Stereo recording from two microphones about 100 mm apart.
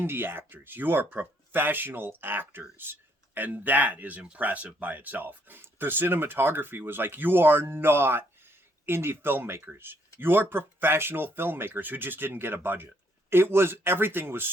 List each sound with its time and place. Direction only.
0.0 s speech: 20° right (ahead or behind)